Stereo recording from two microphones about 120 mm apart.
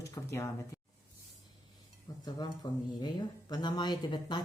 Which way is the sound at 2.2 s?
35° left (ahead or behind).